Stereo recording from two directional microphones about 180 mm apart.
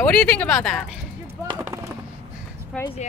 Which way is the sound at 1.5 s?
15° right (ahead or behind).